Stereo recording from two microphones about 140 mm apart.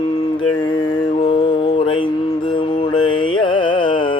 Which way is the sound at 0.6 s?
35° left (ahead or behind).